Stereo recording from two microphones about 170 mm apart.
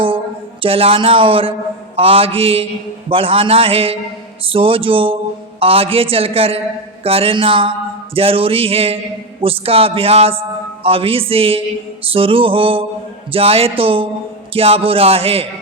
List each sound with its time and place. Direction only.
0.6 s a man's voice: 35° right (ahead or behind)